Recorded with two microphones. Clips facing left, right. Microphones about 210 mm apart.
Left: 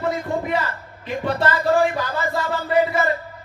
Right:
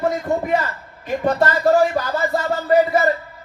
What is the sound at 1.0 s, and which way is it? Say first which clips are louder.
Music: right 4 dB; 45° right (ahead or behind).